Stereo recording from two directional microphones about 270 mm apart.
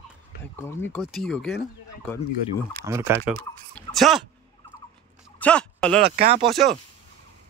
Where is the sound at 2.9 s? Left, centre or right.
Centre.